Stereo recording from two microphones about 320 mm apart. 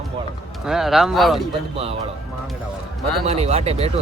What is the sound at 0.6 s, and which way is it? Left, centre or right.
Speech, centre.